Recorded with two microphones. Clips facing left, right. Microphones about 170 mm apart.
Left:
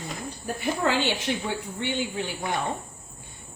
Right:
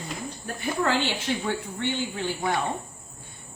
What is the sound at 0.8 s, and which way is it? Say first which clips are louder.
Speech: left 2 dB; 15° left (ahead or behind).